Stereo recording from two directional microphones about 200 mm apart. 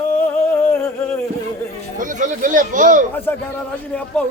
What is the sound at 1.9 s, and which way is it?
Speech, 40° right (ahead or behind).